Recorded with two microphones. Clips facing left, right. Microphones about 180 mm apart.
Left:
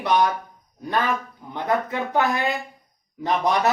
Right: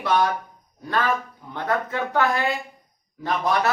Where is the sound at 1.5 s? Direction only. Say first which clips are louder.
Left 1 dB; 15° left (ahead or behind).